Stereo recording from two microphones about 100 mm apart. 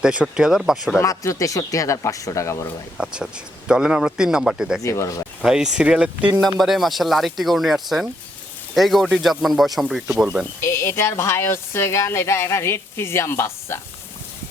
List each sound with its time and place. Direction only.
0.0 s speech: 10° right (ahead or behind)
0.9 s speech: 30° left (ahead or behind)
3.0 s speech: 10° right (ahead or behind)
4.8 s speech: 30° left (ahead or behind)
5.5 s speech: 5° right (ahead or behind)
6.6 s speech: centre (ahead or behind)
10.6 s speech: 25° left (ahead or behind)